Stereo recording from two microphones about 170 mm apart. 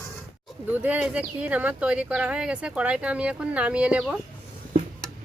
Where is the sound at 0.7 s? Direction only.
10° right (ahead or behind).